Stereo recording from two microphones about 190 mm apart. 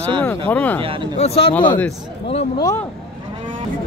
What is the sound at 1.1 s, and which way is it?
Speech, 35° left (ahead or behind).